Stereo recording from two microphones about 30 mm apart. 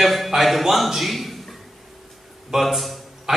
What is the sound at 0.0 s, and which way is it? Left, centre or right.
A man's voice, centre.